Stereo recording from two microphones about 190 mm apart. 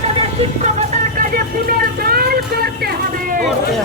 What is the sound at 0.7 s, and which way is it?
Vehicle, 45° right (ahead or behind).